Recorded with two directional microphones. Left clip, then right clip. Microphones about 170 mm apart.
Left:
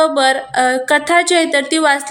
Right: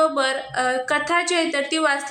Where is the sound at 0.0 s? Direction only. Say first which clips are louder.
Left 7 dB; 30° left (ahead or behind).